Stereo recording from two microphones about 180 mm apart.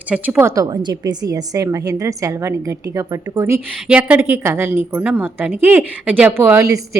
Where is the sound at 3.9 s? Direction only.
10° right (ahead or behind).